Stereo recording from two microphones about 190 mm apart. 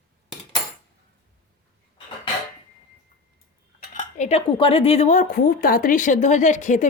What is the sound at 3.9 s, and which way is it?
Speech, 40° left (ahead or behind).